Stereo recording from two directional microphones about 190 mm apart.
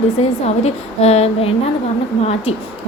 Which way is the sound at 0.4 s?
35° left (ahead or behind).